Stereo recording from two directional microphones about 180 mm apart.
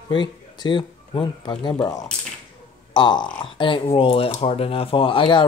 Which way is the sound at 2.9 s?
25° left (ahead or behind).